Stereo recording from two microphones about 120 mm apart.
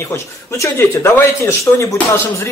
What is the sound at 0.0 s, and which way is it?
Speech, 20° left (ahead or behind).